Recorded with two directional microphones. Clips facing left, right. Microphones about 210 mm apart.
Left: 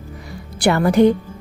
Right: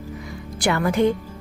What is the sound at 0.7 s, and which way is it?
Speech, 40° left (ahead or behind).